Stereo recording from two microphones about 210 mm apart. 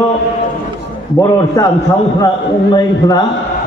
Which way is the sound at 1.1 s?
15° left (ahead or behind).